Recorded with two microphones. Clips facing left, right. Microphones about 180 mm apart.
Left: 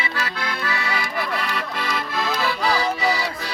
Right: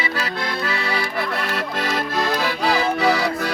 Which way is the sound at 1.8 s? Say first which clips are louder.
Right 4 dB; 55° right (ahead or behind).